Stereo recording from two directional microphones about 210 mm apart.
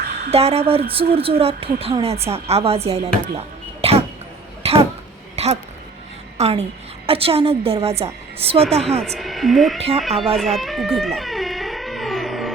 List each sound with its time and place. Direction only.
0.3 s a woman's voice: 30° right (ahead or behind)
4.6 s a sound: 30° right (ahead or behind)
6.3 s a woman's voice: 30° right (ahead or behind)
9.0 s a woman's voice: centre (ahead or behind)
9.7 s a woman's voice: 30° right (ahead or behind)
10.0 s a woman's voice: centre (ahead or behind)
10.3 s music: centre (ahead or behind)